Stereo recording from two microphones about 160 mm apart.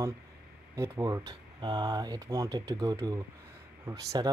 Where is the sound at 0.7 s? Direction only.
20° right (ahead or behind).